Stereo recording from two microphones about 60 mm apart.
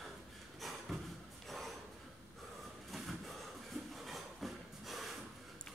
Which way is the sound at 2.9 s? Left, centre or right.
Centre.